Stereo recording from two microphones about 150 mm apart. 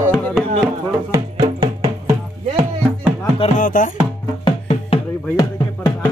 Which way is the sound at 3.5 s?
60° left (ahead or behind).